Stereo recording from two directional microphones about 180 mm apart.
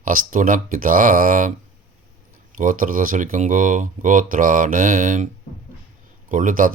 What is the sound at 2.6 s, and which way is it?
Speech, 50° right (ahead or behind).